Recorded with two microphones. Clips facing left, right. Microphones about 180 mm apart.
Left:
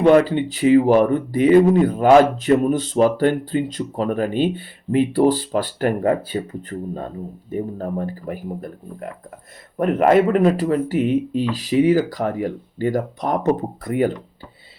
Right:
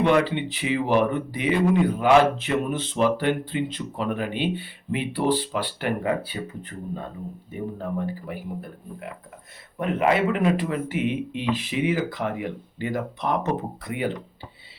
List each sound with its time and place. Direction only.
0.0 s speech: 40° left (ahead or behind)